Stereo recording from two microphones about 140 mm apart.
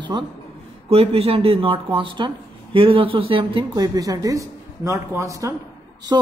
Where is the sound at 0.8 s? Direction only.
45° right (ahead or behind).